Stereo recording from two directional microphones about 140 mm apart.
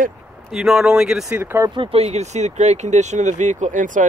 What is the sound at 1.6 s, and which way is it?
Speech, 40° right (ahead or behind).